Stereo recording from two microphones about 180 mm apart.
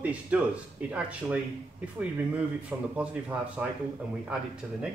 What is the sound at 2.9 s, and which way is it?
Speech, 5° right (ahead or behind).